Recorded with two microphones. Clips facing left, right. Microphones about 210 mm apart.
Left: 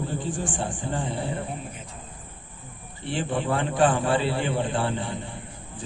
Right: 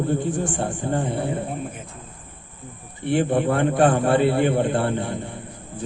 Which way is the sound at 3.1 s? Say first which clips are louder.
Right 7 dB; 60° right (ahead or behind).